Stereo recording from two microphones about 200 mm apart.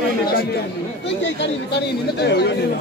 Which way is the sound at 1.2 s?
60° left (ahead or behind).